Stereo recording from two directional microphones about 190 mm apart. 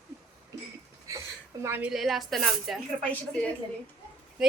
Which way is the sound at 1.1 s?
15° right (ahead or behind).